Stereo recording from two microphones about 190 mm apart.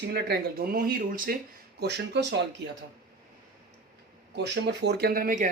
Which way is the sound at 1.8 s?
60° right (ahead or behind).